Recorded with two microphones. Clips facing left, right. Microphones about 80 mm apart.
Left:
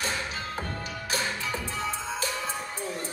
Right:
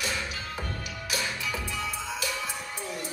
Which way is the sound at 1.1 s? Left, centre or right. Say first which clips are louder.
Left 1 dB; left.